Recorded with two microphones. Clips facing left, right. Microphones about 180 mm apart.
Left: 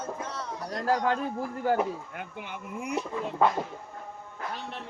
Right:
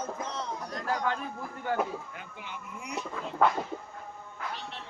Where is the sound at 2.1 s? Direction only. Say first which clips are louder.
Left 4 dB; 55° left (ahead or behind).